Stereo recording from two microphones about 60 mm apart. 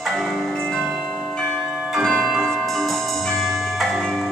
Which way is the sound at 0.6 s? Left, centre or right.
Centre.